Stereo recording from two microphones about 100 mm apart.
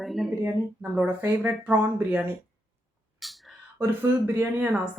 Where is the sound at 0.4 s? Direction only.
15° right (ahead or behind).